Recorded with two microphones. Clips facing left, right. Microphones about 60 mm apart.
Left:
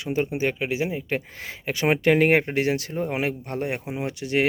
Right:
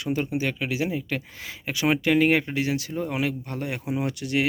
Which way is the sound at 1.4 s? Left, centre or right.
Left.